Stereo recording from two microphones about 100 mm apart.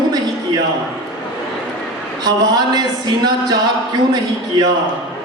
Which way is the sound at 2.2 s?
45° right (ahead or behind).